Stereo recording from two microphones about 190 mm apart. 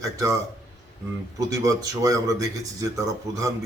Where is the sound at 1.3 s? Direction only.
15° right (ahead or behind).